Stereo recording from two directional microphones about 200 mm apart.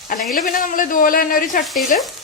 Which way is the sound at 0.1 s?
45° left (ahead or behind).